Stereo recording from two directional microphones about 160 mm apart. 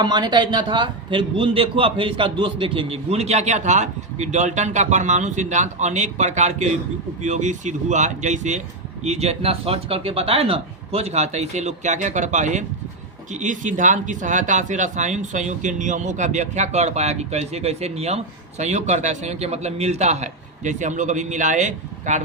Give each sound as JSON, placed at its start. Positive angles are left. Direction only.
{"t": 0.0, "sound": "a man's voice", "side_deg": -25}